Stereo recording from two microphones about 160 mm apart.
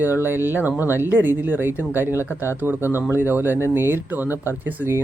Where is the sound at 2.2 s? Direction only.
15° left (ahead or behind).